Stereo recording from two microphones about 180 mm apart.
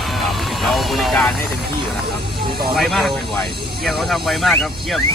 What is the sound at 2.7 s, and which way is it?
Speech, centre (ahead or behind).